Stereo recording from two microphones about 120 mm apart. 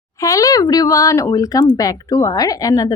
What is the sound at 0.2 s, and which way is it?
Speech, 25° left (ahead or behind).